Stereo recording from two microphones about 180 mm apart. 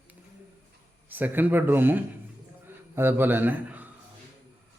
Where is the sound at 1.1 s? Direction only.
10° right (ahead or behind).